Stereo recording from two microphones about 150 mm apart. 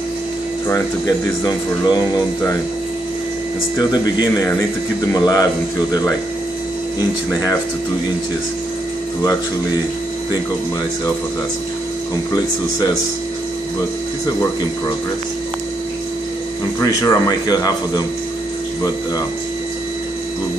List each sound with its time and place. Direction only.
0.7 s speech: 25° left (ahead or behind)
3.7 s speech: 25° left (ahead or behind)
16.8 s speech: 25° left (ahead or behind)